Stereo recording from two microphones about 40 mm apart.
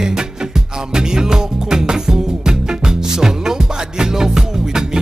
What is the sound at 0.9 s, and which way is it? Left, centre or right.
Music, centre.